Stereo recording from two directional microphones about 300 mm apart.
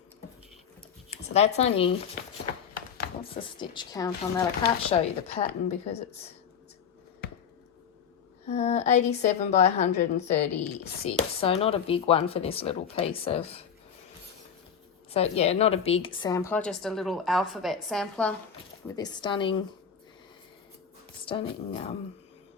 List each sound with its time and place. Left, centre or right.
1.1 s speech: left
3.2 s speech: centre
8.4 s speech: left
15.1 s a woman's voice: centre
18.9 s speech: centre
21.2 s speech: centre